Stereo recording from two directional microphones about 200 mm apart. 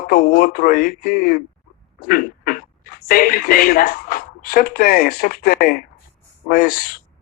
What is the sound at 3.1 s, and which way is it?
Speech, 45° left (ahead or behind).